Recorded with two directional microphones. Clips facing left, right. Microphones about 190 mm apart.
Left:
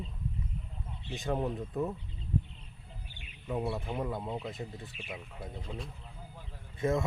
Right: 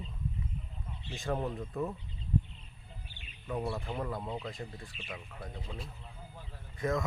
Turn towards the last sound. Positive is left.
turn(degrees=25)  # may be behind; listen again after turning